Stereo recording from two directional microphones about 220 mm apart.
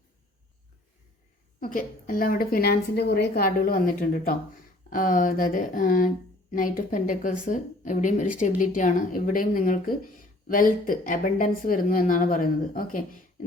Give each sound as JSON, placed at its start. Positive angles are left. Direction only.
{"t": 1.5, "sound": "a woman's voice", "side_deg": 40}